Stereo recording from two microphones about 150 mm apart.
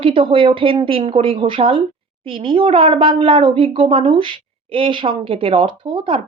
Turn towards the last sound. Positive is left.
turn(degrees=-35)  # may be behind; listen again after turning